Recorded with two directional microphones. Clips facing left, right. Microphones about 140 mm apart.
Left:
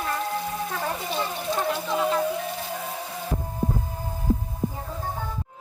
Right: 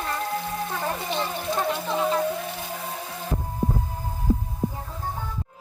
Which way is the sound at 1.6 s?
Centre (ahead or behind).